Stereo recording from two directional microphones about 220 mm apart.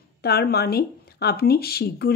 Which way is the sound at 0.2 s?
45° left (ahead or behind).